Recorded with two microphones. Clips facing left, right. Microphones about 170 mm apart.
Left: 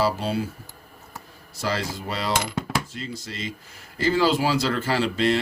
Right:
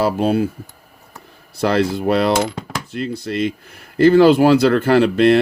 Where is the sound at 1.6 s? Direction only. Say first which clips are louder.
Right 11 dB; 60° right (ahead or behind).